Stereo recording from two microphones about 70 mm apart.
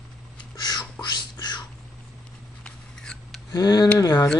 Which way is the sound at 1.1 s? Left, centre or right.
Left.